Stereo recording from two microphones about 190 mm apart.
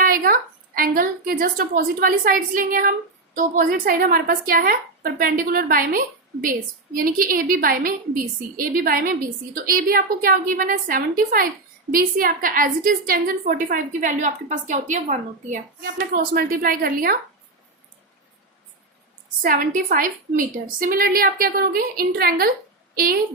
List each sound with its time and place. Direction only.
0.0 s a sound: 50° right (ahead or behind)
0.8 s a woman's voice: 50° right (ahead or behind)
16.1 s a woman's voice: 50° right (ahead or behind)
19.4 s a woman's voice: 45° right (ahead or behind)